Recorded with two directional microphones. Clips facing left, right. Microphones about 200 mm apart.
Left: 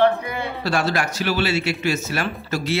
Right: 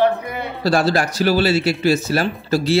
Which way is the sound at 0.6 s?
35° right (ahead or behind).